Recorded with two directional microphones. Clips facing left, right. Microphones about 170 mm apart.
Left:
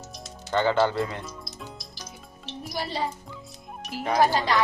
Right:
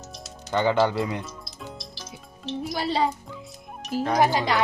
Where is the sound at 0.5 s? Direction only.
15° right (ahead or behind).